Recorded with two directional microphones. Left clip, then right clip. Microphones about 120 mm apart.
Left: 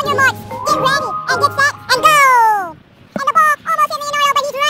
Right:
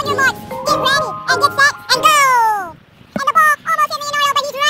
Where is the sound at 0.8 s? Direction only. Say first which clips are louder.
Even; centre (ahead or behind).